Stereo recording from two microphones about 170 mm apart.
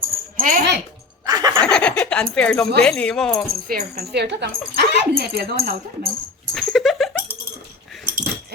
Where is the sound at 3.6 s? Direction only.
60° right (ahead or behind); by 4.5 s 85° right.